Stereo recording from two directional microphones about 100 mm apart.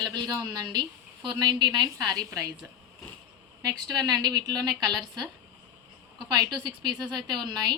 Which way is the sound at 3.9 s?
40° right (ahead or behind).